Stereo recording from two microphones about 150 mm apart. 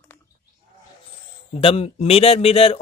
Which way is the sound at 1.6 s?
40° left (ahead or behind).